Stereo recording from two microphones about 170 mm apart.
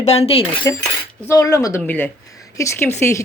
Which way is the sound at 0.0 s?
40° left (ahead or behind).